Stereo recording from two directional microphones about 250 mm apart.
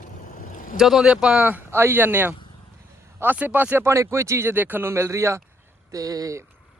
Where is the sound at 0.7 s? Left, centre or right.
Centre.